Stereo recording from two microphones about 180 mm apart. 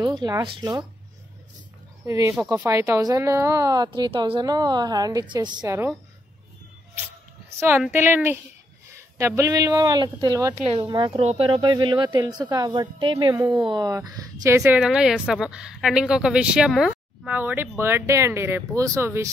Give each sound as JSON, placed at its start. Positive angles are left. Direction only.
{"t": 0.0, "sound": "speech", "side_deg": -25}
{"t": 2.0, "sound": "a woman's voice", "side_deg": -15}
{"t": 7.5, "sound": "a woman's voice", "side_deg": -10}